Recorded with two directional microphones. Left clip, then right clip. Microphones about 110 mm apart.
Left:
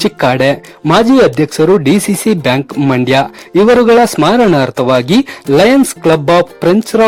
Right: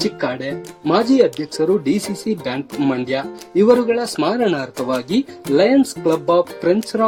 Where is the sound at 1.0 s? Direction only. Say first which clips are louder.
Left 8 dB; 55° left (ahead or behind).